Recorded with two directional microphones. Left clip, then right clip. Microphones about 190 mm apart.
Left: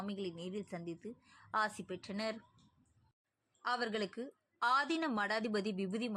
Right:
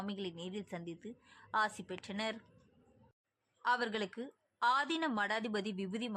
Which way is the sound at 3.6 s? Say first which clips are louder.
Right 3 dB; 10° left (ahead or behind).